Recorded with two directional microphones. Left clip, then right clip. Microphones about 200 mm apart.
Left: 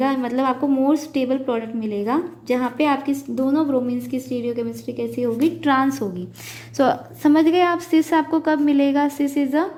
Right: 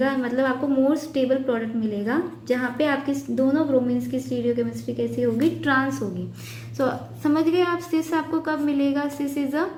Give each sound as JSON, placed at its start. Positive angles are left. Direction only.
{"t": 0.0, "sound": "a woman's voice", "side_deg": 40}